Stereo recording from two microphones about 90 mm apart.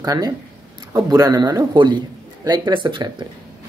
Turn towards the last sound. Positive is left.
turn(degrees=-60)  # may be behind; listen again after turning